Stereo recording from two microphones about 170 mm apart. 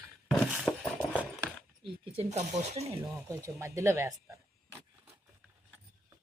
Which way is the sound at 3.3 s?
15° right (ahead or behind).